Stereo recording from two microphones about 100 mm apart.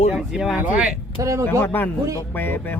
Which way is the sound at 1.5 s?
20° left (ahead or behind).